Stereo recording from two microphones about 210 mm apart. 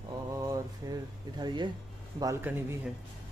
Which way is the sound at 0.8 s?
15° right (ahead or behind).